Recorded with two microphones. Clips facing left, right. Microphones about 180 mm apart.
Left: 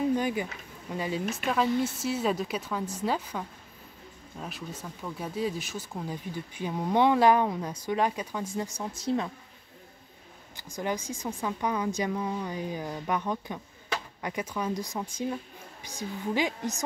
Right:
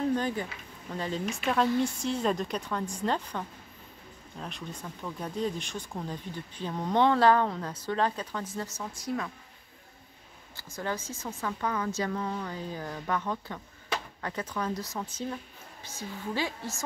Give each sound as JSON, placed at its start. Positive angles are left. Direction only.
{"t": 0.0, "sound": "a sound", "side_deg": 10}
{"t": 0.9, "sound": "a woman's voice", "side_deg": 10}
{"t": 10.5, "sound": "speech", "side_deg": 15}